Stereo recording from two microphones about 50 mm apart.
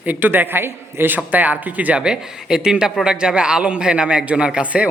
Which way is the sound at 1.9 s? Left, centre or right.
Centre.